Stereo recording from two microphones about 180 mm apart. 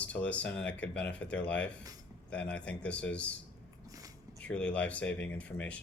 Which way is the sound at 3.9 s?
20° right (ahead or behind).